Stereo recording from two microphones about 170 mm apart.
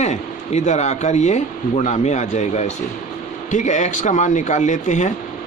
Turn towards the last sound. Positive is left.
turn(degrees=45)  # may be behind; listen again after turning